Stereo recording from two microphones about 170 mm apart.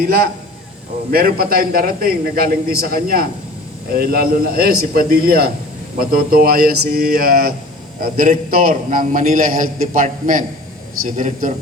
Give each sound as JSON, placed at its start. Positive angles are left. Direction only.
{"t": 0.0, "sound": "a man's voice", "side_deg": -65}